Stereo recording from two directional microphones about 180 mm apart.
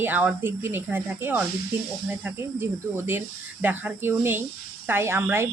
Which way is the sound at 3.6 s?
10° right (ahead or behind).